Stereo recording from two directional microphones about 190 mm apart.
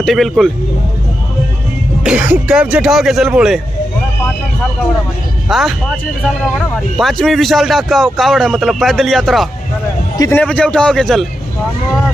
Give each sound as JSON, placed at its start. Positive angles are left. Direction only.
{"t": 0.0, "sound": "speech", "side_deg": 0}
{"t": 2.0, "sound": "speech", "side_deg": -5}
{"t": 5.5, "sound": "speech", "side_deg": 0}
{"t": 10.1, "sound": "a man's voice", "side_deg": 20}
{"t": 10.4, "sound": "speech", "side_deg": 5}